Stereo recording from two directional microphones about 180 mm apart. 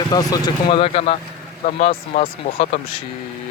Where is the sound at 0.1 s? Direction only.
20° left (ahead or behind).